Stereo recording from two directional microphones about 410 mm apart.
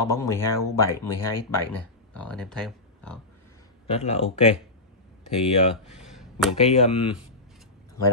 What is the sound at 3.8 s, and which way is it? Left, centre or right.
Speech, centre.